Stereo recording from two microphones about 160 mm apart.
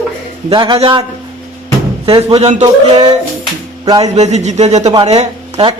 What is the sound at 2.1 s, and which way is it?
Speech, 35° right (ahead or behind).